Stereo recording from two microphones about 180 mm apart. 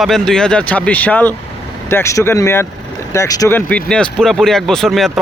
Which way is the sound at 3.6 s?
5° left (ahead or behind).